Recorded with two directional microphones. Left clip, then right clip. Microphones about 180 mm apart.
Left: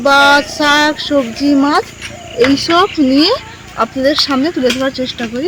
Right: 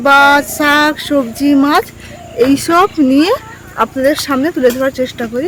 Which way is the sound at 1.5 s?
15° right (ahead or behind).